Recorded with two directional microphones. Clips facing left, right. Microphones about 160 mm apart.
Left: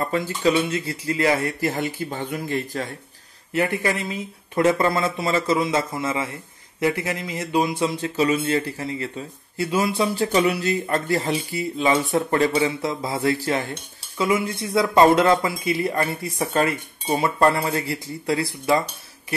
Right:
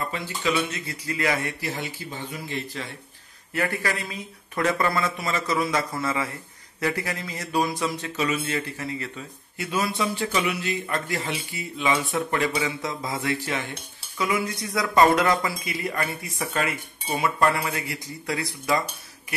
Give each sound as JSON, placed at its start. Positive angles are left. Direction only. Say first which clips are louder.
{"t": 0.0, "sound": "speech", "louder": "left 7 dB", "side_deg": 45}
{"t": 0.5, "sound": "speech", "louder": "left 5 dB", "side_deg": 30}
{"t": 1.6, "sound": "speech", "louder": "left 7 dB", "side_deg": 50}
{"t": 3.5, "sound": "speech", "louder": "left 5 dB", "side_deg": 20}